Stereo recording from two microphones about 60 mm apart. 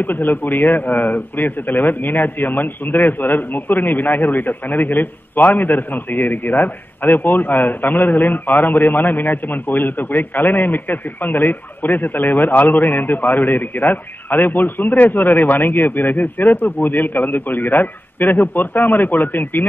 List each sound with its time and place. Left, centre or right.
0.0 s a man's voice: left